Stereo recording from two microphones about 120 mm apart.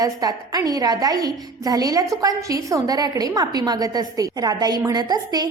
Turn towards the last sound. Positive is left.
turn(degrees=-35)  # may be behind; listen again after turning